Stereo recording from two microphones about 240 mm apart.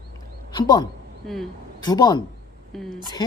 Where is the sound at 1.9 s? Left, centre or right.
Centre.